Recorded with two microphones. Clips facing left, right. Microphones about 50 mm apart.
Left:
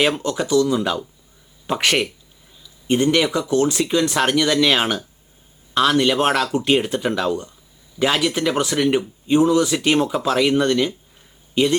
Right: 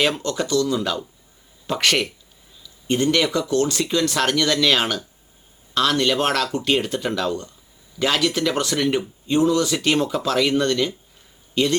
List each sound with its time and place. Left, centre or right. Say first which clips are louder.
0.1 s speech: left 3 dB; centre